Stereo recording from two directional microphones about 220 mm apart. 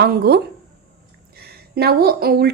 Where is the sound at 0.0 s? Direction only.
50° right (ahead or behind).